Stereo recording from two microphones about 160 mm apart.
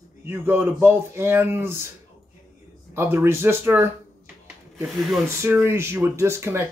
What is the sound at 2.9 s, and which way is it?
Speech, 15° right (ahead or behind).